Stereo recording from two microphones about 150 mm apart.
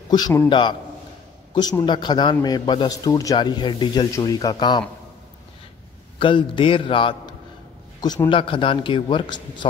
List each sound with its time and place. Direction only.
0.5 s a man's voice: 30° left (ahead or behind)
6.1 s a man's voice: 35° left (ahead or behind)